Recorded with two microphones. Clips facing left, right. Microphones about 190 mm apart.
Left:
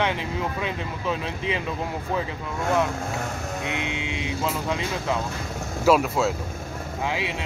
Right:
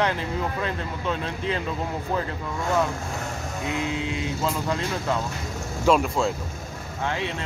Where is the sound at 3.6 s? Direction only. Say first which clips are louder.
Right 4 dB; 80° left.